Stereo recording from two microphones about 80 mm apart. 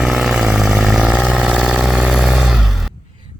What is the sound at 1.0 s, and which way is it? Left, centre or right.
Vehicle, centre.